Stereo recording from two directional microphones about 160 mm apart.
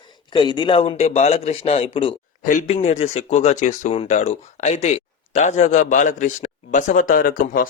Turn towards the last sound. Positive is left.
turn(degrees=60)  # may be behind; listen again after turning